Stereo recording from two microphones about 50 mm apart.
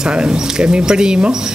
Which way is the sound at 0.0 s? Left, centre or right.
Centre.